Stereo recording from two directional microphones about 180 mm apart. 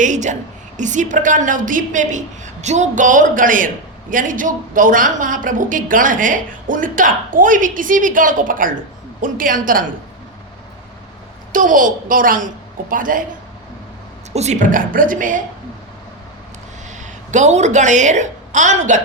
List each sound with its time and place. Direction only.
0.0 s a woman's voice: 40° right (ahead or behind)
11.5 s a woman's voice: 45° right (ahead or behind)
14.3 s a woman's voice: 40° right (ahead or behind)
17.0 s a woman's voice: 40° right (ahead or behind)